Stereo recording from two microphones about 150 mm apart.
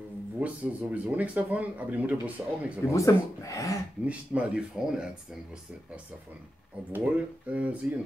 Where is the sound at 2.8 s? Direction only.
20° left (ahead or behind).